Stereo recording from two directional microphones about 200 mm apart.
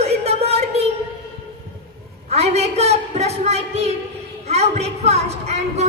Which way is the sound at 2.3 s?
30° right (ahead or behind).